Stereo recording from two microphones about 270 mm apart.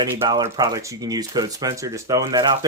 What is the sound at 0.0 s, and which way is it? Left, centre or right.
Speech, centre.